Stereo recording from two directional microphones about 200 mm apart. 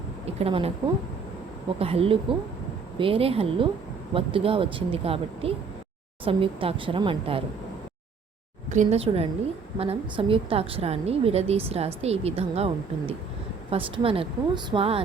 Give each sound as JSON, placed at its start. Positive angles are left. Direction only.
{"t": 0.3, "sound": "speech", "side_deg": -30}
{"t": 1.8, "sound": "a woman's voice", "side_deg": -30}
{"t": 8.7, "sound": "a woman's voice", "side_deg": -35}